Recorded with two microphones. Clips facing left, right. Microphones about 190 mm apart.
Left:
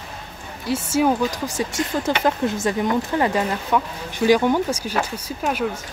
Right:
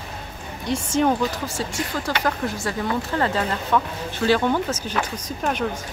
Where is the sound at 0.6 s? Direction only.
5° left (ahead or behind).